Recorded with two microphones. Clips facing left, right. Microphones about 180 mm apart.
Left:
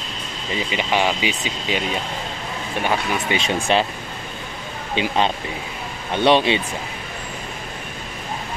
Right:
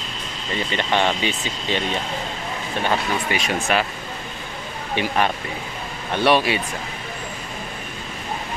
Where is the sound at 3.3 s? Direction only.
25° left (ahead or behind).